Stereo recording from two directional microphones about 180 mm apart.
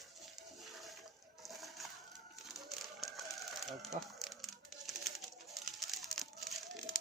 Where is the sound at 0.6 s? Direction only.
Centre (ahead or behind).